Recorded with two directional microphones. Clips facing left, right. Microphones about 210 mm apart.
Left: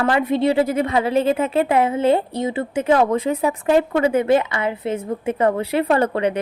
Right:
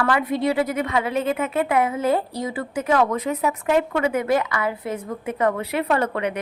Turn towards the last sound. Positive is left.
turn(degrees=30)  # may be behind; listen again after turning